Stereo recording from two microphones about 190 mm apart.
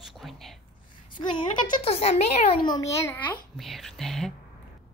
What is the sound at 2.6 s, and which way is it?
A child's voice, 20° left (ahead or behind).